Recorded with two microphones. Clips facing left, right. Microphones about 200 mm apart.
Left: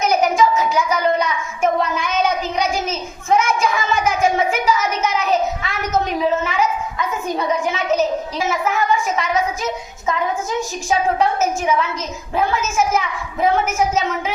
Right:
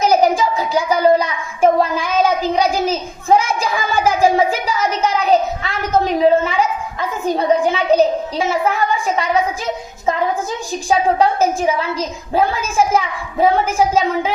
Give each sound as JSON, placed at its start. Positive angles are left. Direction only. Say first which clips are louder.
{"t": 0.0, "sound": "child singing", "louder": "right 2 dB", "side_deg": -35}
{"t": 10.8, "sound": "a sound", "louder": "right 4 dB", "side_deg": -35}
{"t": 12.3, "sound": "a woman's voice", "louder": "right 2 dB", "side_deg": -30}